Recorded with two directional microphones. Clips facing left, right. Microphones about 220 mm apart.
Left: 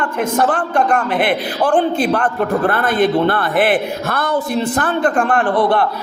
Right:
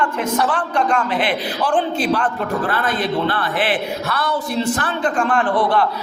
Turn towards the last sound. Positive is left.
turn(degrees=55)  # may be behind; listen again after turning